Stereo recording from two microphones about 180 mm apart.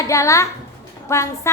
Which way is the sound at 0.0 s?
15° left (ahead or behind).